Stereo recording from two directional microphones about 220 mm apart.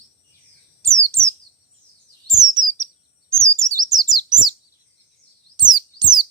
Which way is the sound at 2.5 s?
15° right (ahead or behind).